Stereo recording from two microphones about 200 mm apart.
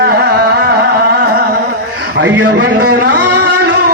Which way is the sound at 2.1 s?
60° right (ahead or behind).